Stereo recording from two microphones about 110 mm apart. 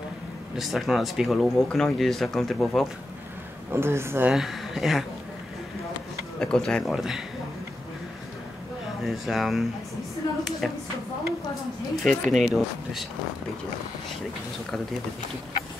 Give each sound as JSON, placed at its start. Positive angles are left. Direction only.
{"t": 0.6, "sound": "speech", "side_deg": 0}
{"t": 3.7, "sound": "a woman's voice", "side_deg": -25}
{"t": 4.3, "sound": "speech", "side_deg": 0}
{"t": 6.4, "sound": "speech", "side_deg": 5}
{"t": 7.0, "sound": "speech", "side_deg": -5}
{"t": 9.0, "sound": "speech", "side_deg": 0}
{"t": 12.0, "sound": "speech", "side_deg": 0}